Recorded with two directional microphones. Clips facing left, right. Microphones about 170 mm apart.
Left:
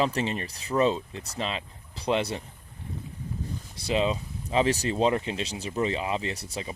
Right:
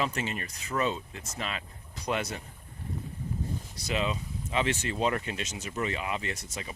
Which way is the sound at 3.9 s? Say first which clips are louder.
Left 5 dB; 30° left (ahead or behind).